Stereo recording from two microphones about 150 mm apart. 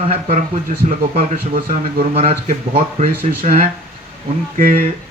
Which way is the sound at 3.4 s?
55° right (ahead or behind).